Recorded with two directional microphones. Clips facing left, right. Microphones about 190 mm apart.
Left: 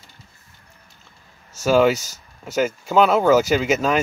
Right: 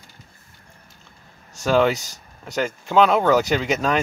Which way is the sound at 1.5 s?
5° left (ahead or behind).